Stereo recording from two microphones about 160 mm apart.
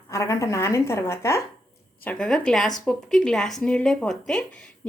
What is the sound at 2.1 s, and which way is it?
A woman's voice, 5° left (ahead or behind).